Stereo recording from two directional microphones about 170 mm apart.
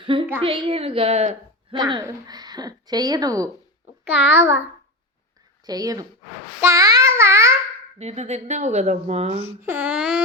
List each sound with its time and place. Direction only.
0.0 s a woman's voice: 30° right (ahead or behind)
1.7 s speech: 25° right (ahead or behind)
4.1 s a sound: 10° right (ahead or behind)
5.6 s speech: 20° right (ahead or behind)
6.6 s child singing: 15° right (ahead or behind)
7.9 s speech: 40° right (ahead or behind)
9.6 s a sound: 10° right (ahead or behind)